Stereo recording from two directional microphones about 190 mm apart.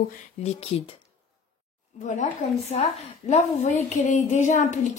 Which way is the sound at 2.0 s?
35° left (ahead or behind).